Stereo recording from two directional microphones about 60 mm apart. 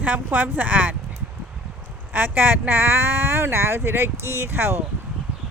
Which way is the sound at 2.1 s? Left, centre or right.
Right.